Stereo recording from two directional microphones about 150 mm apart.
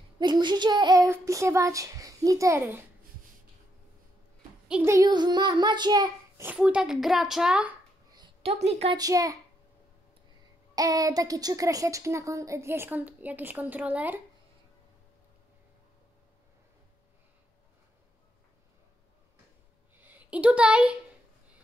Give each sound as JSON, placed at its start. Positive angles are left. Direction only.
{"t": 0.2, "sound": "a child's voice", "side_deg": -30}
{"t": 4.8, "sound": "a child's voice", "side_deg": -25}
{"t": 6.4, "sound": "a woman's voice", "side_deg": -10}
{"t": 8.4, "sound": "a woman's voice", "side_deg": -45}
{"t": 8.9, "sound": "a child's voice", "side_deg": -25}
{"t": 10.7, "sound": "a child's voice", "side_deg": -25}
{"t": 20.0, "sound": "speech", "side_deg": -10}